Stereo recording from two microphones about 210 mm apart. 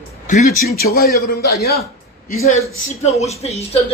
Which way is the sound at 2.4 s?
30° left (ahead or behind).